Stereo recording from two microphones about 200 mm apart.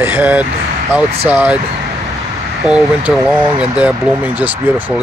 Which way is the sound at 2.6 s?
5° right (ahead or behind).